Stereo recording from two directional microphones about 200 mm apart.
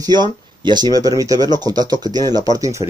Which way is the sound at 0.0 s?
20° right (ahead or behind).